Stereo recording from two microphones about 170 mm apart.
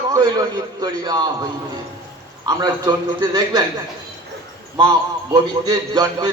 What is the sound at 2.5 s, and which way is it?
A man's voice, 25° right (ahead or behind).